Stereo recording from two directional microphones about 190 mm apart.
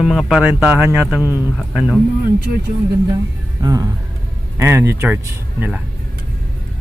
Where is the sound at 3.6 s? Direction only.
20° right (ahead or behind).